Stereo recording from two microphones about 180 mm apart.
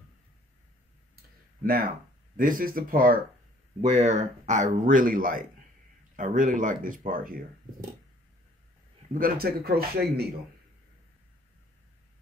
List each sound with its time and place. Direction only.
1.6 s speech: 50° right (ahead or behind)
3.8 s speech: 40° right (ahead or behind)
9.1 s speech: 55° right (ahead or behind)